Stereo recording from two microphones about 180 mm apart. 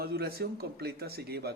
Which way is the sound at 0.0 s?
60° right (ahead or behind).